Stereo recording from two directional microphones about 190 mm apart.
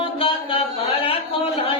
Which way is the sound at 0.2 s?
30° left (ahead or behind).